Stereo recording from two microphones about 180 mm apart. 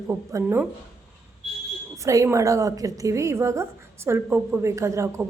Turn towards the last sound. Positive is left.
turn(degrees=-15)  # may be behind; listen again after turning